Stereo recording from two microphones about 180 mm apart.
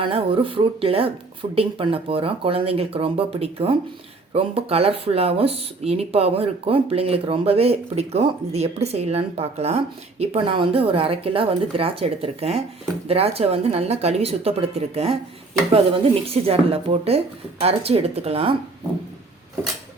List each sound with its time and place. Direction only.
0.0 s speech: 30° right (ahead or behind)
16.2 s speech: 35° right (ahead or behind)